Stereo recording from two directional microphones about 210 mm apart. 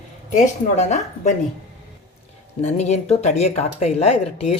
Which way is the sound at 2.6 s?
30° left (ahead or behind).